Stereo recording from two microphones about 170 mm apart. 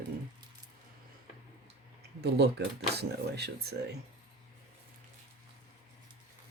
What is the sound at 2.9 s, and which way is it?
Speech, 75° right (ahead or behind).